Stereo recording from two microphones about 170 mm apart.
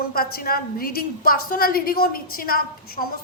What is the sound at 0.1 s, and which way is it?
A woman's voice, 60° left (ahead or behind).